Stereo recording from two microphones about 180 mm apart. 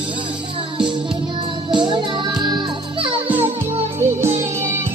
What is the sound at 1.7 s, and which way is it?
Music, 25° right (ahead or behind).